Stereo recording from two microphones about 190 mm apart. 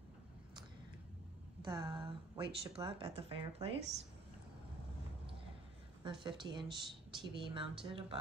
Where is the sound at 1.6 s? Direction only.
25° right (ahead or behind).